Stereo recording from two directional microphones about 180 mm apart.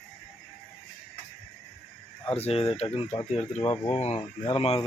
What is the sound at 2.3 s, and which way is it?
Speech, 35° left (ahead or behind).